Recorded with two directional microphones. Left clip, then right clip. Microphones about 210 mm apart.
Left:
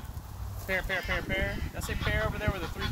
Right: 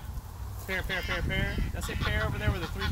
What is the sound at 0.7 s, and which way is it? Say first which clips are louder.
Speech: left 2 dB; 20° left (ahead or behind).